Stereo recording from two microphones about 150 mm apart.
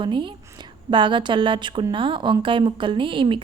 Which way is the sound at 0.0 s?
35° right (ahead or behind).